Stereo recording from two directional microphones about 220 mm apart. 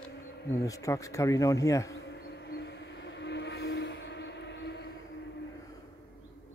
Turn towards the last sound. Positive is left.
turn(degrees=50)  # may be behind; listen again after turning